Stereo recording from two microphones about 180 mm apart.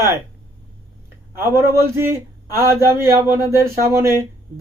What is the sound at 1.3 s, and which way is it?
A man's voice, 15° right (ahead or behind).